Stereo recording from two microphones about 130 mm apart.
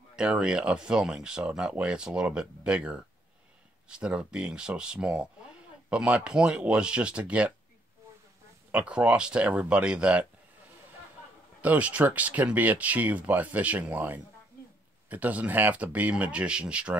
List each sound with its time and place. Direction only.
0.1 s speech: 5° right (ahead or behind)
8.7 s speech: 10° right (ahead or behind)
11.6 s speech: 10° right (ahead or behind)